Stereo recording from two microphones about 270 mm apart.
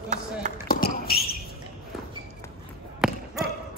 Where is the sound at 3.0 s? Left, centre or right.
Centre.